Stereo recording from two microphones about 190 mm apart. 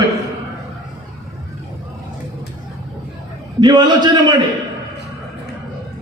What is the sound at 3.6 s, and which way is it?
Speech, 20° right (ahead or behind).